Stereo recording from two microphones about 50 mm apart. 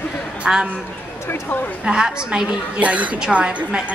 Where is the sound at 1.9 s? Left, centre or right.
Centre.